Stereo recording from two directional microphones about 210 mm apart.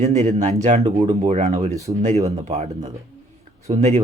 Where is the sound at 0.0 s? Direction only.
30° right (ahead or behind).